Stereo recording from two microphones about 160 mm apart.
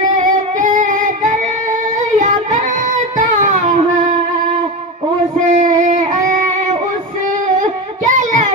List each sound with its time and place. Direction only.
0.2 s music: 55° right (ahead or behind)
5.5 s a sound: 50° right (ahead or behind)
8.0 s child singing: 50° right (ahead or behind)